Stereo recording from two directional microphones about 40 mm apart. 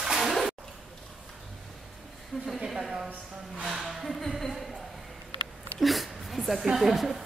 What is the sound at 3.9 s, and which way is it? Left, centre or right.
Speech, centre.